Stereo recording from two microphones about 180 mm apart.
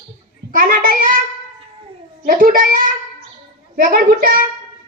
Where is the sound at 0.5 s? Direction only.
50° right (ahead or behind).